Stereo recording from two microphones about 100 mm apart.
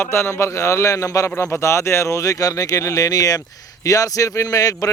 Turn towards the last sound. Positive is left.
turn(degrees=35)  # may be behind; listen again after turning